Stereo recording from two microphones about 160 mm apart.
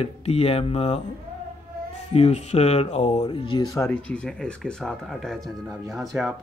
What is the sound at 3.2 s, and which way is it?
Speech, 30° left (ahead or behind).